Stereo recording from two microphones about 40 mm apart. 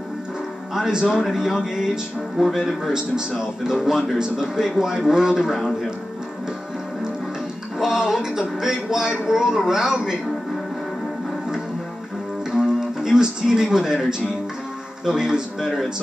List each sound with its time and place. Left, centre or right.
0.7 s a man's voice: centre
5.6 s speech: centre
7.8 s a man's voice: centre
12.4 s music: centre
15.0 s a man's voice: centre
15.6 s speech: centre